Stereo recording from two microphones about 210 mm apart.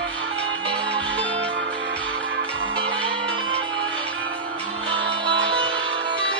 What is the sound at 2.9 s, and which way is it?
Music, 25° right (ahead or behind).